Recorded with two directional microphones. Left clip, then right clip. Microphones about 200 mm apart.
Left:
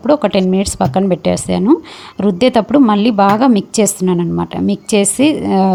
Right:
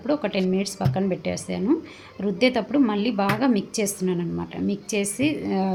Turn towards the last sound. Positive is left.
turn(degrees=40)  # may be behind; listen again after turning